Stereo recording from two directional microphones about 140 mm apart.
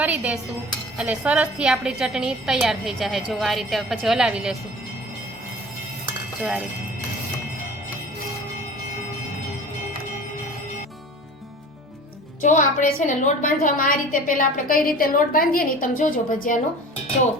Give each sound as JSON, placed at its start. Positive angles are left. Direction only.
{"t": 0.0, "sound": "a woman's voice", "side_deg": -10}
{"t": 6.4, "sound": "speech", "side_deg": -10}
{"t": 12.4, "sound": "a woman's voice", "side_deg": 70}